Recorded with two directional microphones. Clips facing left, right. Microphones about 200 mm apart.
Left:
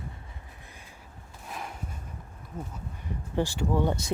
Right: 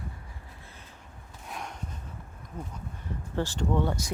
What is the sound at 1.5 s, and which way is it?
Horse, centre (ahead or behind).